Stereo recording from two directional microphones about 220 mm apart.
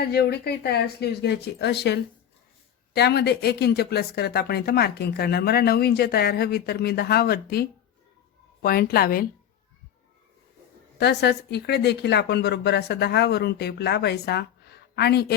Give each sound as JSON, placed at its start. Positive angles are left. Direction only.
{"t": 0.0, "sound": "speech", "side_deg": 45}
{"t": 8.6, "sound": "a woman's voice", "side_deg": 45}
{"t": 10.9, "sound": "speech", "side_deg": 50}